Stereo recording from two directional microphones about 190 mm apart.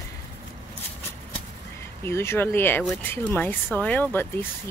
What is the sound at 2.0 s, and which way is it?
Speech, 15° left (ahead or behind).